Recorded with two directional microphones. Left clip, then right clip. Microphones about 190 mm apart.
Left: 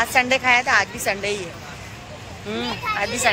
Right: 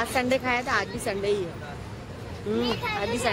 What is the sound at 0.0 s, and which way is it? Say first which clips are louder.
A woman's voice: left 7 dB; centre (ahead or behind).